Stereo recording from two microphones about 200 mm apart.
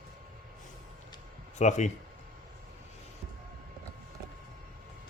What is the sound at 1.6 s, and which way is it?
Speech, 35° left (ahead or behind).